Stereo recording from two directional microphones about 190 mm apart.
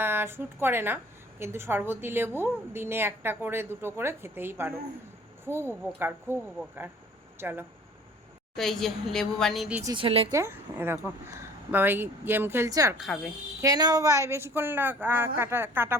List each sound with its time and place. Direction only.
0.0 s a woman's voice: 10° right (ahead or behind)
8.5 s a woman's voice: centre (ahead or behind)
9.8 s a woman's voice: 25° right (ahead or behind)
10.3 s a woman's voice: 10° right (ahead or behind)
13.0 s a woman's voice: centre (ahead or behind)
13.6 s a woman's voice: 20° right (ahead or behind)